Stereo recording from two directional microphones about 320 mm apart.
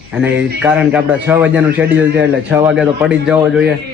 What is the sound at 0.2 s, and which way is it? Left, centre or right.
A man's voice, centre.